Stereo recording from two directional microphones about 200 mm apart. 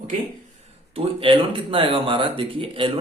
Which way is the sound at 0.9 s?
30° right (ahead or behind).